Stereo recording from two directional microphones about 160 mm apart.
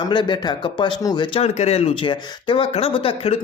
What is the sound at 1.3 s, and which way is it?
Speech, 40° left (ahead or behind).